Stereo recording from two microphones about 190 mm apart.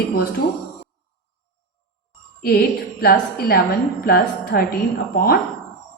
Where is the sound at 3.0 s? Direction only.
55° left (ahead or behind).